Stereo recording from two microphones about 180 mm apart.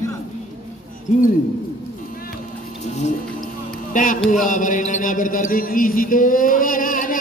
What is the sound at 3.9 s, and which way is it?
Speech, 50° left (ahead or behind).